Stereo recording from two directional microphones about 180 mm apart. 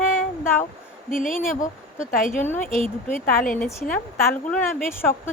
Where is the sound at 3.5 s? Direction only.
5° left (ahead or behind).